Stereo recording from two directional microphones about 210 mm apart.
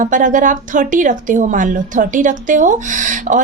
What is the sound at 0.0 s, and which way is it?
Speech, 40° right (ahead or behind).